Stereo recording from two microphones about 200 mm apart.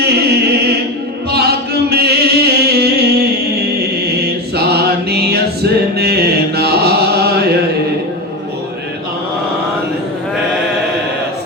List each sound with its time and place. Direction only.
0.1 s chant: 55° right (ahead or behind)
1.3 s singing: 55° right (ahead or behind)
3.8 s chant: 55° right (ahead or behind)